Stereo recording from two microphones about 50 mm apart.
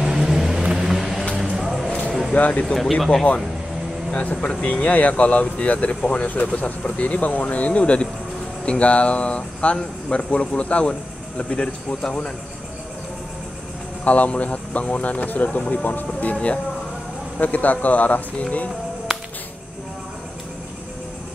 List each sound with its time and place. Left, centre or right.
0.0 s vehicle: centre
2.3 s speech: left
2.6 s speech: centre
4.1 s speech: left
14.0 s speech: left